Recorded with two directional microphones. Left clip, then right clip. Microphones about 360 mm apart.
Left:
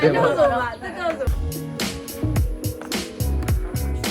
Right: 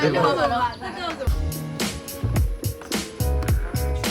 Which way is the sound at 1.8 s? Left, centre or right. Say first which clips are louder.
Left 1 dB; centre.